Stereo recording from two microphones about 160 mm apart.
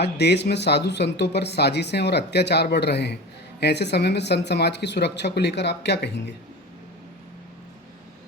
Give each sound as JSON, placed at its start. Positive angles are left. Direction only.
{"t": 0.0, "sound": "speech", "side_deg": 90}